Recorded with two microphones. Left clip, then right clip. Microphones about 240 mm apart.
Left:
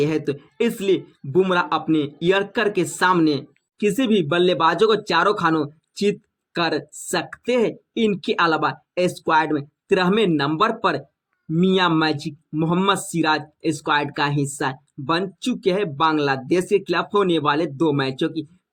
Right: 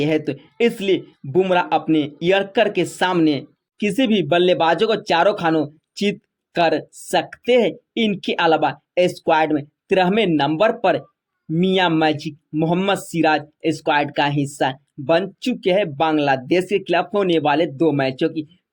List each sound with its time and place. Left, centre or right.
0.0 s speech: centre